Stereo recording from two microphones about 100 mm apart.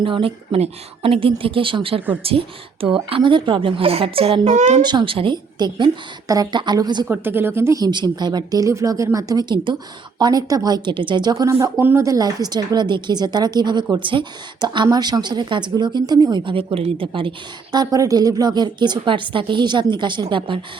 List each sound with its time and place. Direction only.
0.0 s a woman's voice: 60° right (ahead or behind)
4.8 s a woman's voice: 50° right (ahead or behind)
7.1 s speech: 20° right (ahead or behind)
7.8 s a woman's voice: 45° right (ahead or behind)
11.8 s speech: 20° right (ahead or behind)
12.0 s a woman's voice: 40° right (ahead or behind)
13.9 s a woman's voice: 55° right (ahead or behind)
14.8 s a woman's voice: 40° right (ahead or behind)
16.4 s speech: 60° right (ahead or behind)
17.7 s a woman's voice: 40° right (ahead or behind)